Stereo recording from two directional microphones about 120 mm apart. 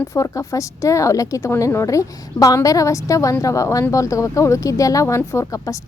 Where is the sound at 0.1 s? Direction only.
25° left (ahead or behind).